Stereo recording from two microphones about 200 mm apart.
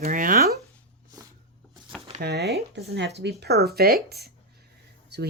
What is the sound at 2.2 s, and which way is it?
A woman's voice, 55° right (ahead or behind).